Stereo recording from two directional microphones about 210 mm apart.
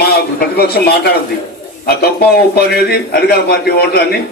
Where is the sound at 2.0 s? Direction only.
50° left (ahead or behind).